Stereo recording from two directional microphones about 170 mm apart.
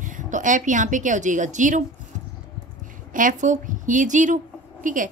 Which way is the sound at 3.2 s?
50° right (ahead or behind).